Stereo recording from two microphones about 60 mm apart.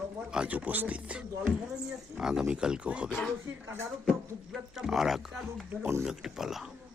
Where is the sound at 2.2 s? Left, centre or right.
Centre.